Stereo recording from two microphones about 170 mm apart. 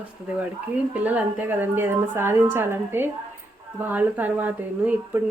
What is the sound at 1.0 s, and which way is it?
Speech, 10° right (ahead or behind).